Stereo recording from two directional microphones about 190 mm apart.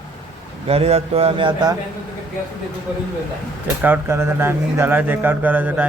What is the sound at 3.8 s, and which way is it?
Speech, 10° right (ahead or behind).